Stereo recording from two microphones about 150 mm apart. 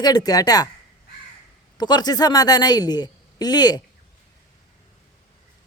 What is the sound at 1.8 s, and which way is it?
Speech, 25° left (ahead or behind).